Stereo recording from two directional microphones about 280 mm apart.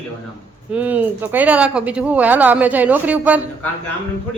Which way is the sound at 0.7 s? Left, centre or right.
Centre.